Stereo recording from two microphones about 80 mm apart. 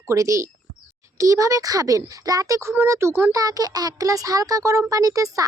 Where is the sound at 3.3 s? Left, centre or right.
Right.